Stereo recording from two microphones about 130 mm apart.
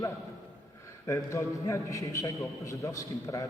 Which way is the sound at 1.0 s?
25° left (ahead or behind).